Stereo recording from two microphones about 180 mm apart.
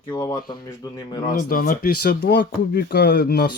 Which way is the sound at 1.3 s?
50° left (ahead or behind).